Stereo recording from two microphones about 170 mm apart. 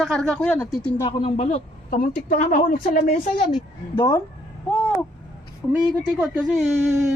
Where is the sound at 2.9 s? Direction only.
60° left (ahead or behind).